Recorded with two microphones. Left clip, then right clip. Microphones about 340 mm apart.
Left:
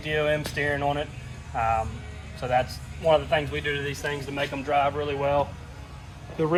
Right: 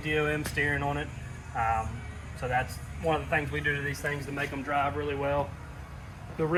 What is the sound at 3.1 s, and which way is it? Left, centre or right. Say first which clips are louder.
Speech: left 7 dB; left.